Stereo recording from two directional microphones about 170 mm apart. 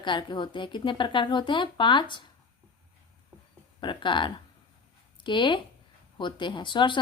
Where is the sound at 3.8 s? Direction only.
30° left (ahead or behind).